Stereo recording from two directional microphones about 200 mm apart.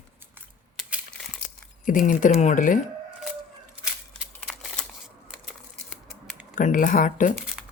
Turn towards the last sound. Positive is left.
turn(degrees=40)  # may be behind; listen again after turning